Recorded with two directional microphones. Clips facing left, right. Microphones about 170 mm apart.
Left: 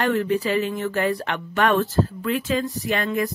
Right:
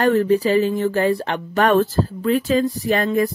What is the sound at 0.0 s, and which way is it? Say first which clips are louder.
Speech: right 5 dB; 40° right (ahead or behind).